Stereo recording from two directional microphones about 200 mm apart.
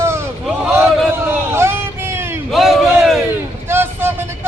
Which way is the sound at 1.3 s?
10° right (ahead or behind).